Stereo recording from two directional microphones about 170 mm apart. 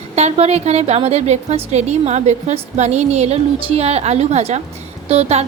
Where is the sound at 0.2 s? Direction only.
40° right (ahead or behind).